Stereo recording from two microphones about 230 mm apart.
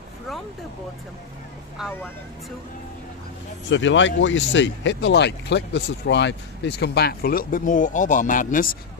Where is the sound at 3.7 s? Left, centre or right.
Left.